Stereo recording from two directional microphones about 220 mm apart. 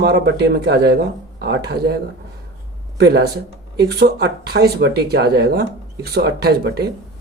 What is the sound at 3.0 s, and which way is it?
Speech, 45° right (ahead or behind).